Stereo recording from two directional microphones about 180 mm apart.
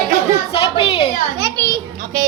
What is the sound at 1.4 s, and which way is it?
Speech, 20° right (ahead or behind).